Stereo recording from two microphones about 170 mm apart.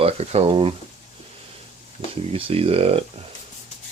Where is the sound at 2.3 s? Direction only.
35° right (ahead or behind).